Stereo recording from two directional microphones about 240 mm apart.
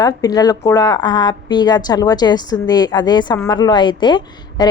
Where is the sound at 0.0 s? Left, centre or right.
Centre.